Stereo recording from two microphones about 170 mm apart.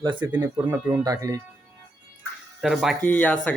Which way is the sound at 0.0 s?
25° right (ahead or behind).